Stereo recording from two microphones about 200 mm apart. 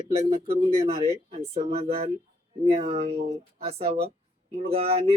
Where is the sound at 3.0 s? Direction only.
55° right (ahead or behind).